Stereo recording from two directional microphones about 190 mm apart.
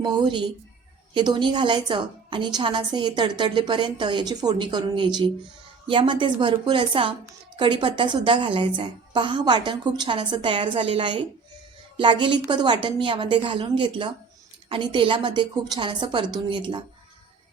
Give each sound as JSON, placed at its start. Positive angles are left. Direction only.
{"t": 0.0, "sound": "a woman's voice", "side_deg": -20}